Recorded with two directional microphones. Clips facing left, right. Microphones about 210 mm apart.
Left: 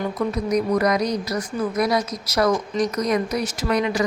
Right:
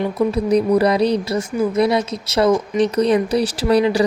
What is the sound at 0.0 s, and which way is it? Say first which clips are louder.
Speech: right 5 dB; 30° right (ahead or behind).